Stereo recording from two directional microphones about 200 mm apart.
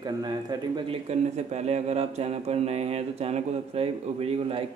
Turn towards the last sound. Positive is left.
turn(degrees=-30)  # may be behind; listen again after turning